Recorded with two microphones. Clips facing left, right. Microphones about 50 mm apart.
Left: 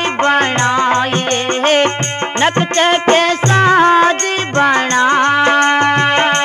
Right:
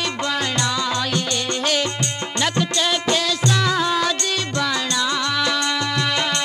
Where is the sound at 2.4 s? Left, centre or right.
Left.